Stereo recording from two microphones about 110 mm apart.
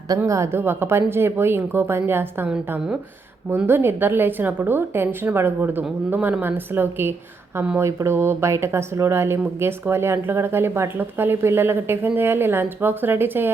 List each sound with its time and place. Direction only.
0.3 s speech: 25° right (ahead or behind)
3.7 s speech: 20° right (ahead or behind)